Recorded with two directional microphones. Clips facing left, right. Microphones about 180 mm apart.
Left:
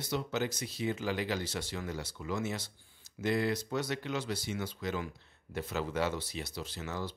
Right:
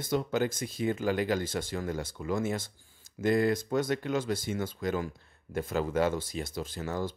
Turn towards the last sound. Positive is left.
turn(degrees=-50)  # may be behind; listen again after turning